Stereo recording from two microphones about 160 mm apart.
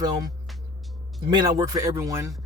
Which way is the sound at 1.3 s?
25° right (ahead or behind).